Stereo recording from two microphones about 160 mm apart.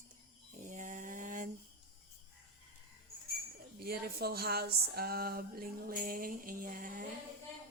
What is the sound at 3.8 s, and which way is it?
Speech, 75° right (ahead or behind).